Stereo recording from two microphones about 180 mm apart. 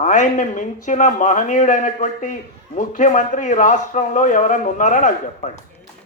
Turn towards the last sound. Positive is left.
turn(degrees=45)  # may be behind; listen again after turning